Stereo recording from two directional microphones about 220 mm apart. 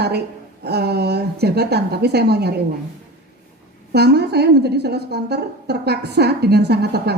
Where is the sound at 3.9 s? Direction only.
50° right (ahead or behind).